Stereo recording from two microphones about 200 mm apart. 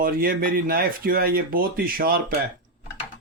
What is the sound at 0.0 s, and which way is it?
Speech, 45° right (ahead or behind).